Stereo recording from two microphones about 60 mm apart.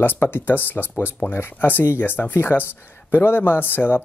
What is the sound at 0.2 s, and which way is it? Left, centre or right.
Speech, left.